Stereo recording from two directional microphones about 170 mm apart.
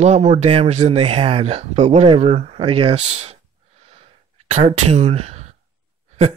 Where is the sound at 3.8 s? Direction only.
35° right (ahead or behind).